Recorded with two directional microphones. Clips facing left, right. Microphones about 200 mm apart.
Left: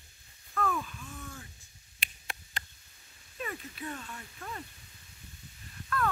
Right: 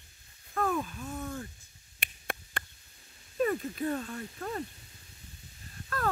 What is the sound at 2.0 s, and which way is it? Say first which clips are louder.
Finger snapping: right 6 dB; 55° right (ahead or behind).